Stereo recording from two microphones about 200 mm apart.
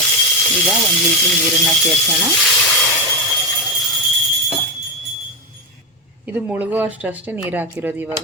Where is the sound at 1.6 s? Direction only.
Centre (ahead or behind).